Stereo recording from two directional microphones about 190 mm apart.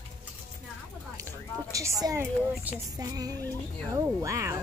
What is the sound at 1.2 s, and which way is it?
Speech, 15° right (ahead or behind).